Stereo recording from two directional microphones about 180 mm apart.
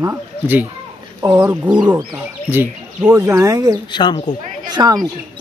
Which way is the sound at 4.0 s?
25° left (ahead or behind).